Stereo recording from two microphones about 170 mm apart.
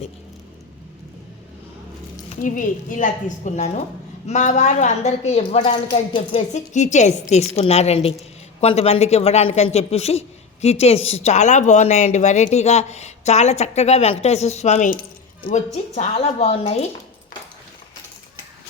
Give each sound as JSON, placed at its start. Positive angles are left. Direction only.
{"t": 2.4, "sound": "a woman's voice", "side_deg": 50}